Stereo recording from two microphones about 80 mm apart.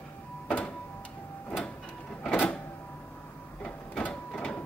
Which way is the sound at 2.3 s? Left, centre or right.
Centre.